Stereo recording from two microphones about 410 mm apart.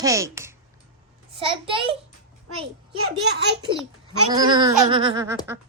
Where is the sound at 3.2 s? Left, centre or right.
Right.